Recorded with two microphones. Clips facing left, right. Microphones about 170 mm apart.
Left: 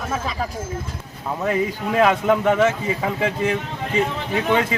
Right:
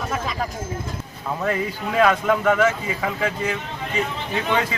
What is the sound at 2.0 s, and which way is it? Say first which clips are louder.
Speech: left 1 dB; 20° left (ahead or behind).